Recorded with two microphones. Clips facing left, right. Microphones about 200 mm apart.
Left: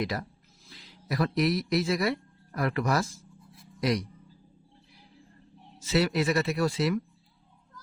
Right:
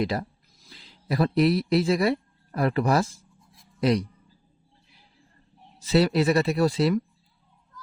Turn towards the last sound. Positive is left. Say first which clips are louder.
# right 5 dB
turn(degrees=-35)  # may be behind; listen again after turning